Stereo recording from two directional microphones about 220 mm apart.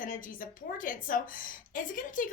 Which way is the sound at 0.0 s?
40° left (ahead or behind).